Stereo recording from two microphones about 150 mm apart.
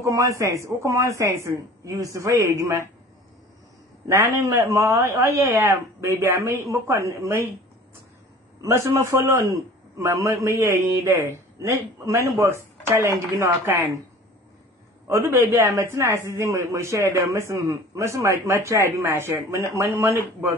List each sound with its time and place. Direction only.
0.0 s a man's voice: 20° right (ahead or behind)
4.4 s a man's voice: 20° right (ahead or behind)
8.6 s a man's voice: 20° right (ahead or behind)
15.0 s a man's voice: 15° right (ahead or behind)